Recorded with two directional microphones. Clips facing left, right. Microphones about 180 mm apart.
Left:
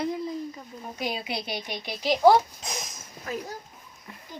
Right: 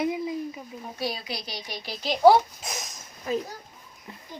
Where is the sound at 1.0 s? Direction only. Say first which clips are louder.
Left 1 dB; 20° left (ahead or behind).